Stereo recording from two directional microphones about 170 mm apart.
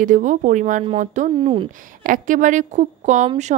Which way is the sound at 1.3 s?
30° right (ahead or behind).